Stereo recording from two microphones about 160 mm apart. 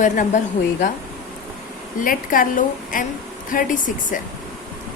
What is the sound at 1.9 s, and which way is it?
A woman's voice, 60° left (ahead or behind).